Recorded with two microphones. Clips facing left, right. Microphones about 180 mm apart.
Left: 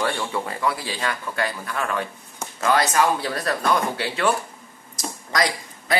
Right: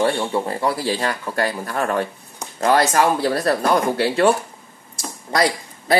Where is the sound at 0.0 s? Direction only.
30° right (ahead or behind).